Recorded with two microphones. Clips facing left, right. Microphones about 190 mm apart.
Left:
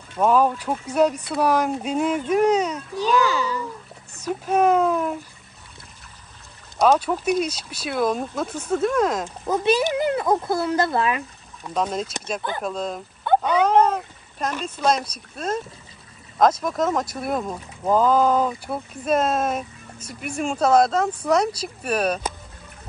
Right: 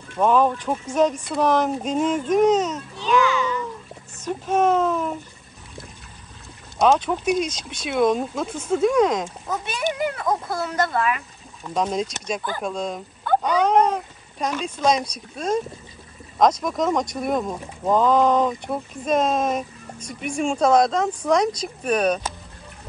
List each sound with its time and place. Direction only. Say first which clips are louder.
0.2 s speech: even; 5° left (ahead or behind)
3.0 s a sound: even; 35° left (ahead or behind)
4.2 s speech: left 1 dB; 10° left (ahead or behind)
6.8 s speech: even; centre (ahead or behind)
9.5 s speech: left 8 dB; 30° left (ahead or behind)
11.7 s speech: right 1 dB; centre (ahead or behind)